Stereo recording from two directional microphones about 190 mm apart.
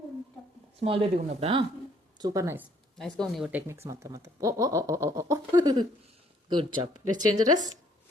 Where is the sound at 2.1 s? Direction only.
20° right (ahead or behind).